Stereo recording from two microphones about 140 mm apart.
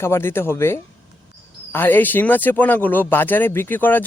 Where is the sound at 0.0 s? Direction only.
15° left (ahead or behind).